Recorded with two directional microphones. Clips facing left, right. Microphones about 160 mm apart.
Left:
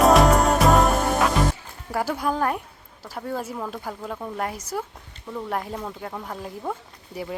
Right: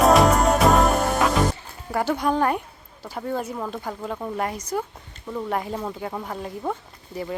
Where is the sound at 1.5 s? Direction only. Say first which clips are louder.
Right 1 dB; 5° left (ahead or behind).